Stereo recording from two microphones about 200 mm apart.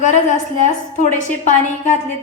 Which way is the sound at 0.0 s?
35° left (ahead or behind).